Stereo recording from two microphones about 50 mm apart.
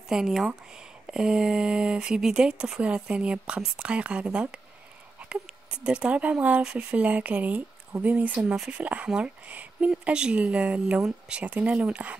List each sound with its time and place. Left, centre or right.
0.1 s speech: centre
5.9 s speech: right
11.0 s speech: centre
11.3 s speech: right